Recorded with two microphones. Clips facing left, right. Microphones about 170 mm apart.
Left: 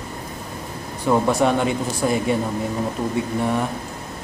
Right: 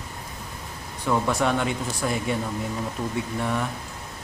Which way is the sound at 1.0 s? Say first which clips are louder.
Left 5 dB; 30° left (ahead or behind).